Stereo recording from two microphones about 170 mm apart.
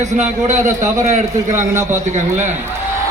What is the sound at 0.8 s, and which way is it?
Speech, 20° right (ahead or behind).